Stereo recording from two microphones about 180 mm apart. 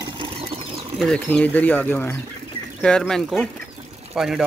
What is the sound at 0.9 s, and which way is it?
Speech, 5° left (ahead or behind).